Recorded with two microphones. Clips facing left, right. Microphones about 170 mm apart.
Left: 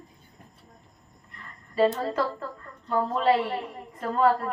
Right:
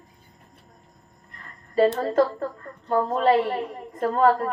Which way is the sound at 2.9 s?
45° right (ahead or behind).